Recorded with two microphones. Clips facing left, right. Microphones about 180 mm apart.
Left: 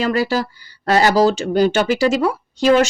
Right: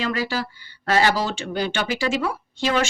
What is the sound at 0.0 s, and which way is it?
Speech, 40° left (ahead or behind).